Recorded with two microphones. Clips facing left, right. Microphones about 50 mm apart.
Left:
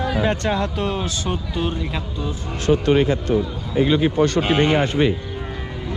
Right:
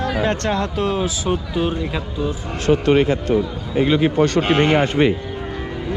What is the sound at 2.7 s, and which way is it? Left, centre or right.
Speech, right.